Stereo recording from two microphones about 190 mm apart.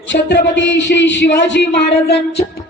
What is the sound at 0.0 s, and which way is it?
Speech, 70° left (ahead or behind).